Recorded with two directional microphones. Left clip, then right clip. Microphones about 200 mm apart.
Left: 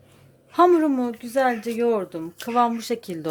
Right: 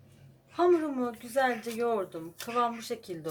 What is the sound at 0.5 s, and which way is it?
A woman's voice, 50° left (ahead or behind).